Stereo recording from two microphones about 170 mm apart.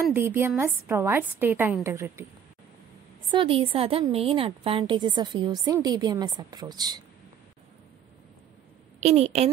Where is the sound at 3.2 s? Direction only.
30° right (ahead or behind).